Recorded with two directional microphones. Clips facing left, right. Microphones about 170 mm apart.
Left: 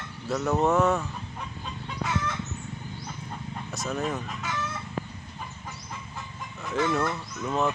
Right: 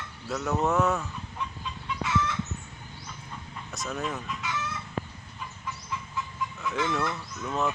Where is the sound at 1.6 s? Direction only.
50° left (ahead or behind).